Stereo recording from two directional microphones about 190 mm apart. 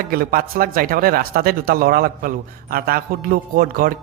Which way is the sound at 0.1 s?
50° right (ahead or behind).